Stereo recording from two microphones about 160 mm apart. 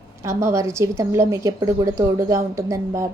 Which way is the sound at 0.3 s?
20° right (ahead or behind).